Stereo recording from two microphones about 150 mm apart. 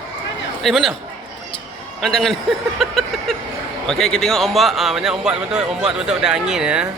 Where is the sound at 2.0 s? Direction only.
Centre (ahead or behind).